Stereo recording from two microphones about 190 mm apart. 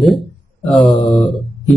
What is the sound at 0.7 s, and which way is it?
Speech, 25° left (ahead or behind).